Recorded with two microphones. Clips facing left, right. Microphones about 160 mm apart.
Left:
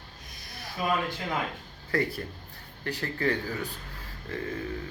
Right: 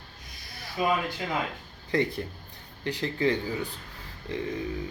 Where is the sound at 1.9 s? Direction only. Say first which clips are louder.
Right 2 dB; 20° right (ahead or behind).